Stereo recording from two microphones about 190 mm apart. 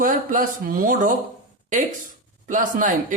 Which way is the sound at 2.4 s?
45° right (ahead or behind).